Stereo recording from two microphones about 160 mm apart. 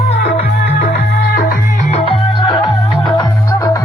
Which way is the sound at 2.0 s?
35° left (ahead or behind).